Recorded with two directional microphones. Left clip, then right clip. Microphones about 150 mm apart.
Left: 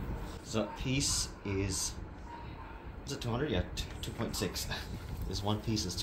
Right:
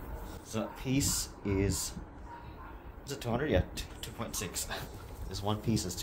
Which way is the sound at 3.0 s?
70° right (ahead or behind).